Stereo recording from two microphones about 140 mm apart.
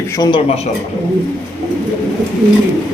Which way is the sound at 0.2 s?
35° left (ahead or behind).